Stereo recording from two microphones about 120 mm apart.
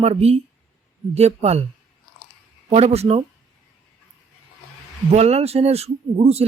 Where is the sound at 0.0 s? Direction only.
60° right (ahead or behind).